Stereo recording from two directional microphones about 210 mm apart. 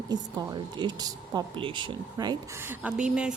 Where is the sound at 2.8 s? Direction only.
5° right (ahead or behind).